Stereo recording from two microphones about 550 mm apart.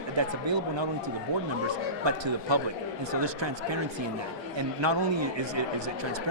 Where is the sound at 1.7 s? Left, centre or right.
Right.